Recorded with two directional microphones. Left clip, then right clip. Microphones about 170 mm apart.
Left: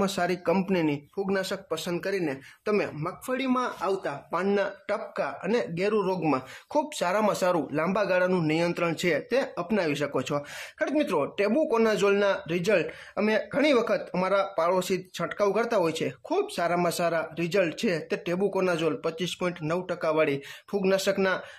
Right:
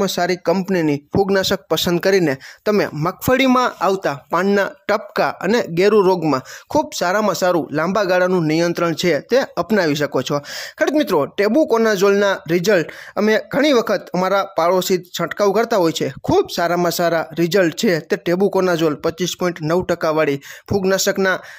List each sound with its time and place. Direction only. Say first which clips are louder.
0.0 s speech: right 8 dB; 30° right (ahead or behind)